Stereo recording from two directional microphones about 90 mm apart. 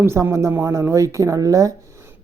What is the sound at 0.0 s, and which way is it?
Speech, 30° right (ahead or behind).